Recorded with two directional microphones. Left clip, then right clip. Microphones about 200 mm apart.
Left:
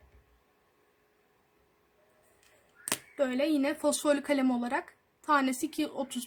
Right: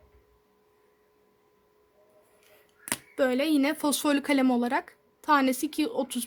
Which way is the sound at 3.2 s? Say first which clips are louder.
Right 4 dB; 45° right (ahead or behind).